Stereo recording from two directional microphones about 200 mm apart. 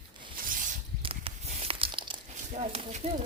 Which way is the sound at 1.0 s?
25° right (ahead or behind).